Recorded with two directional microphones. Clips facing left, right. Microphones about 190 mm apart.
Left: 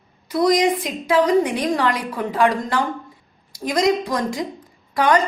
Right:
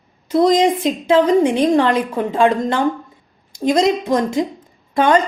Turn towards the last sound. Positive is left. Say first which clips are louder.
# right 3 dB
turn(degrees=-25)  # may be behind; listen again after turning